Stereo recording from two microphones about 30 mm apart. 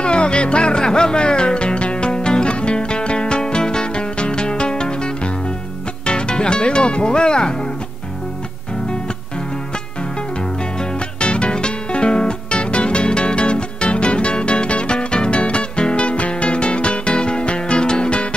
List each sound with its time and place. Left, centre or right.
0.0 s music: left
11.1 s music: left